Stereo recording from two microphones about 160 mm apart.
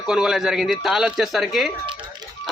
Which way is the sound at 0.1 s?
5° right (ahead or behind).